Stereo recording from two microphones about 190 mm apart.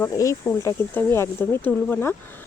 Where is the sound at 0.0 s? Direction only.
15° left (ahead or behind).